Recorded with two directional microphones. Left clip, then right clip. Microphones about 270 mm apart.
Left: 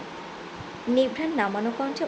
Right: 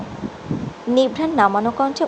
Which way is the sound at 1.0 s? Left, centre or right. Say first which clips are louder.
Right 8 dB; centre.